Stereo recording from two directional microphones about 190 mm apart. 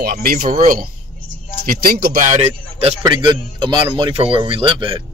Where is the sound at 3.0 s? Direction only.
20° right (ahead or behind).